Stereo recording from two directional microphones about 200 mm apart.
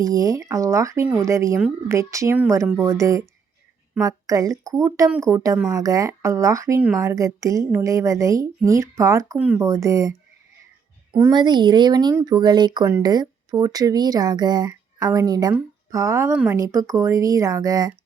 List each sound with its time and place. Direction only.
0.0 s speech: 15° right (ahead or behind)